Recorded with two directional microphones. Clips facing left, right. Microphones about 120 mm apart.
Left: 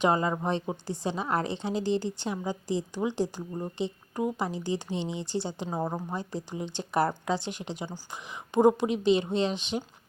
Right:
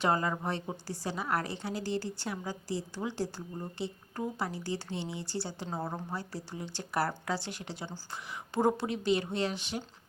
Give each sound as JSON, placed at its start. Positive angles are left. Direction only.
{"t": 0.0, "sound": "a woman's voice", "side_deg": 20}